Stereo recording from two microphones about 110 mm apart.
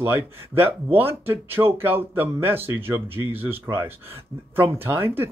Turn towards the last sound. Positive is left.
turn(degrees=-20)  # may be behind; listen again after turning